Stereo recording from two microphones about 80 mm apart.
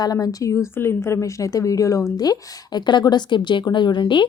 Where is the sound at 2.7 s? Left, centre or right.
Left.